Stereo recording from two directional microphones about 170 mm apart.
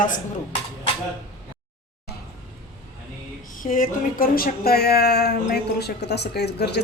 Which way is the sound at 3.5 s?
50° left (ahead or behind).